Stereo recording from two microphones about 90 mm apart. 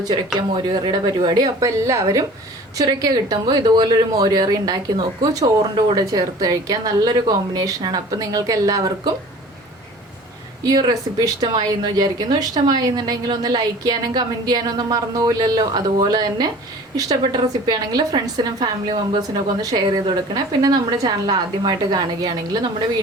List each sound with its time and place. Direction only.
0.3 s a woman's voice: 60° right (ahead or behind); by 8.9 s 40° right (ahead or behind)
10.6 s a woman's voice: 50° right (ahead or behind)